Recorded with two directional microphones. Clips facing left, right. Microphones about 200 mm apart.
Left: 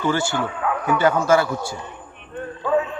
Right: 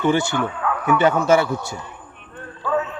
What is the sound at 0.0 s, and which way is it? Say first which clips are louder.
Speech: right 3 dB; 20° right (ahead or behind).